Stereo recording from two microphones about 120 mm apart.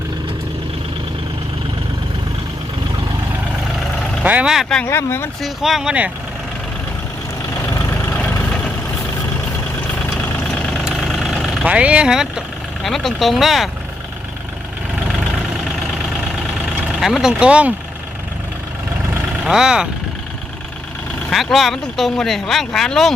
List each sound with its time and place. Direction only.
4.2 s speech: 10° right (ahead or behind)
4.9 s speech: 20° left (ahead or behind)
5.4 s speech: 5° right (ahead or behind)
10.2 s vehicle: 5° left (ahead or behind)
11.6 s speech: 10° right (ahead or behind)
16.9 s speech: 5° right (ahead or behind)
19.5 s speech: 5° right (ahead or behind)
21.2 s speech: centre (ahead or behind)